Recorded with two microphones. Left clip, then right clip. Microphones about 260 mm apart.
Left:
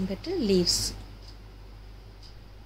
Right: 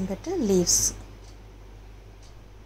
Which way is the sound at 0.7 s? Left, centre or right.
Left.